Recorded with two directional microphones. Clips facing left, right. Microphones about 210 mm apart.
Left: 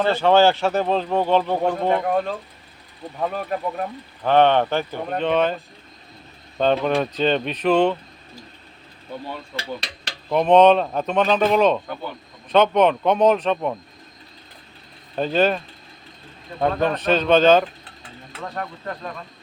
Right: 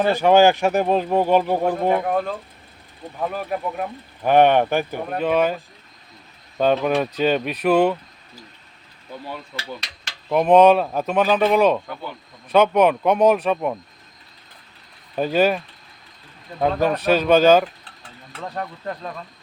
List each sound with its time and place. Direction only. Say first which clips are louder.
0.0 s speech: right 1 dB; 15° right (ahead or behind)
6.6 s speech: right 1 dB; 5° right (ahead or behind)
9.6 s speech: left 3 dB; 30° left (ahead or behind)
10.2 s speech: right 1 dB; 5° right (ahead or behind)
15.1 s speech: right 1 dB; 10° right (ahead or behind)